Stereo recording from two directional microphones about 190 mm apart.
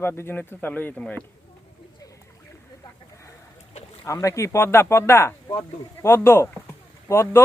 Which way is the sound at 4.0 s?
15° left (ahead or behind).